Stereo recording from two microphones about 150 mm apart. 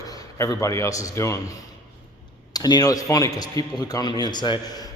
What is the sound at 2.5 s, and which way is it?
A man's voice, 25° left (ahead or behind).